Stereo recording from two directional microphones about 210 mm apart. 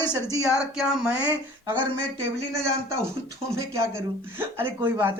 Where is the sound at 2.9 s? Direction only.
15° right (ahead or behind).